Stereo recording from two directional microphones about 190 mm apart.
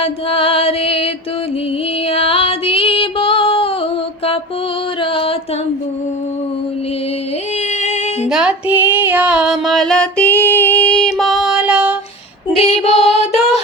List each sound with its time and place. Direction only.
0.0 s music: 30° left (ahead or behind)
2.0 s female singing: 30° left (ahead or behind)
5.1 s a sound: 30° left (ahead or behind)
7.8 s female singing: 35° left (ahead or behind)
8.3 s female singing: 5° right (ahead or behind)
12.5 s female singing: 30° left (ahead or behind)